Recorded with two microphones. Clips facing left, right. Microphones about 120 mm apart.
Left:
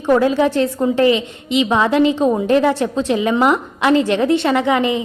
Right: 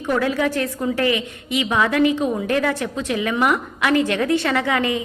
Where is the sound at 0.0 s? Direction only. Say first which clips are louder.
Left 6 dB; 30° left (ahead or behind).